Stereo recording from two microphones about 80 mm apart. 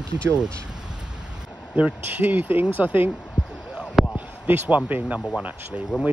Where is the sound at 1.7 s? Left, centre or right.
Centre.